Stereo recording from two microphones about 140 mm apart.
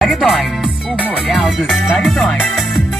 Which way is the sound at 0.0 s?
Centre (ahead or behind).